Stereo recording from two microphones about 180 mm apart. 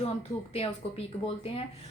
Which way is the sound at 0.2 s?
35° left (ahead or behind).